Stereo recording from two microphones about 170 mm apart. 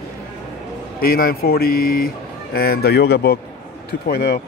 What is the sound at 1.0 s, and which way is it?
Speech, 60° left (ahead or behind).